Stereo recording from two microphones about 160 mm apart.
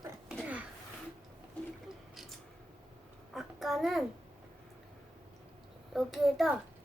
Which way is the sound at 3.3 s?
Centre (ahead or behind).